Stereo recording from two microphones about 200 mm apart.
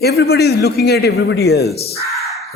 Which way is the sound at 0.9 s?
55° left (ahead or behind).